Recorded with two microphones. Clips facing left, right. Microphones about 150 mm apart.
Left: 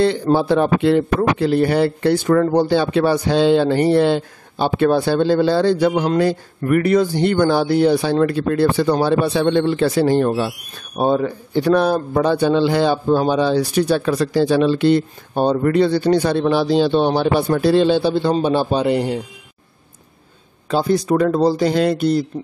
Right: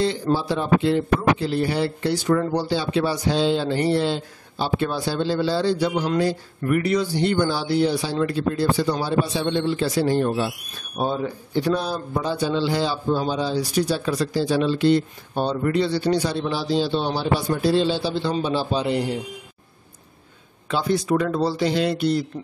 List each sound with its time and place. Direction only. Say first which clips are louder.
0.0 s speech: left 6 dB; 60° left (ahead or behind)
20.6 s speech: left 5 dB; 40° left (ahead or behind)